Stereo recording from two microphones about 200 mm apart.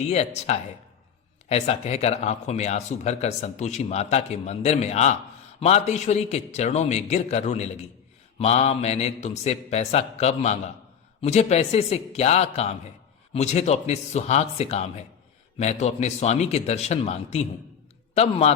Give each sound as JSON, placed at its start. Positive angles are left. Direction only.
{"t": 0.1, "sound": "a man's voice", "side_deg": 35}